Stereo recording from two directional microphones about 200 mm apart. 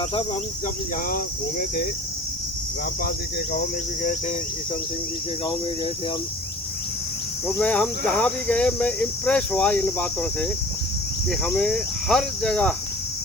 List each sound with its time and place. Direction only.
1.1 s speech: 45° left (ahead or behind)
3.5 s speech: 50° left (ahead or behind)
7.4 s speech: 5° left (ahead or behind)